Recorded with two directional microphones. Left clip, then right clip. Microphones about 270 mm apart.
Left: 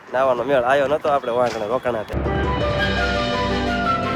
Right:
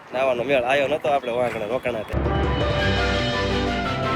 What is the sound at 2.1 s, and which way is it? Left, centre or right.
Music, centre.